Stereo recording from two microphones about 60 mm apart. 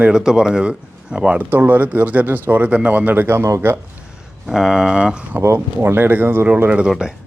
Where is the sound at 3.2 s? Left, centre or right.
Right.